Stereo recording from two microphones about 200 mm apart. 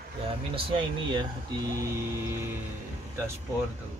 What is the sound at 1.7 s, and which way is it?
Music, 15° right (ahead or behind).